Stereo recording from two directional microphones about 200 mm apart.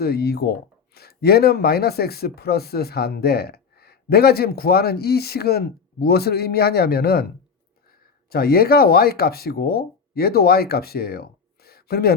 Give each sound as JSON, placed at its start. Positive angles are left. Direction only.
{"t": 0.0, "sound": "speech", "side_deg": 50}
{"t": 8.3, "sound": "speech", "side_deg": 50}